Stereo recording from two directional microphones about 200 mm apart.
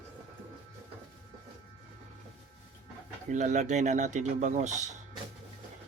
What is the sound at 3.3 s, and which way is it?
Speech, 35° right (ahead or behind).